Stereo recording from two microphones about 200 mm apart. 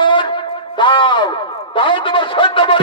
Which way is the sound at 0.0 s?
25° left (ahead or behind).